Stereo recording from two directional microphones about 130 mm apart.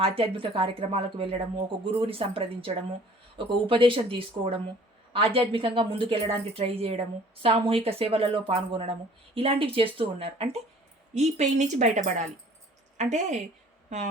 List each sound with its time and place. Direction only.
0.0 s speech: 45° right (ahead or behind)
11.1 s a woman's voice: 65° right (ahead or behind)